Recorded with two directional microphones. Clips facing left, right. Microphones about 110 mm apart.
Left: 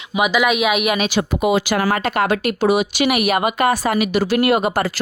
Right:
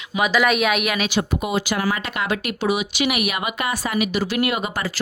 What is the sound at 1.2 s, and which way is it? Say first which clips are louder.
Speech: left 6 dB; 85° left.